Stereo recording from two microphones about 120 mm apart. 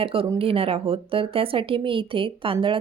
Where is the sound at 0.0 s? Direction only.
50° right (ahead or behind).